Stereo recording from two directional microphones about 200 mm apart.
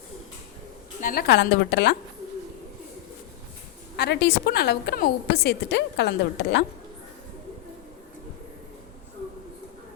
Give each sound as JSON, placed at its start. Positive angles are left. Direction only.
{"t": 1.0, "sound": "a woman's voice", "side_deg": 55}
{"t": 3.9, "sound": "a woman's voice", "side_deg": 55}